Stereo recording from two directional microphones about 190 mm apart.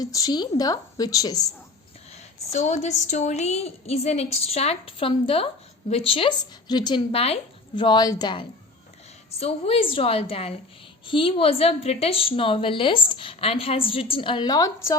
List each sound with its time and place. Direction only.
0.0 s a woman's voice: 20° left (ahead or behind)
2.1 s a woman's voice: 35° left (ahead or behind); by 14.9 s 15° left (ahead or behind)